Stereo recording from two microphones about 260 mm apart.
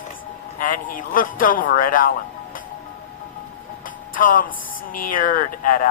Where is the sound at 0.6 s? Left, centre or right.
Left.